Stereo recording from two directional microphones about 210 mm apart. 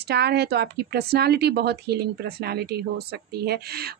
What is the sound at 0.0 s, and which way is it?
A woman's voice, 50° right (ahead or behind).